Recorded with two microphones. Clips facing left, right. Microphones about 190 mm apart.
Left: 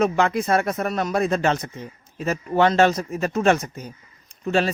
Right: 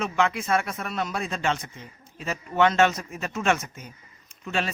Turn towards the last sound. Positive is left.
turn(degrees=35)  # may be behind; listen again after turning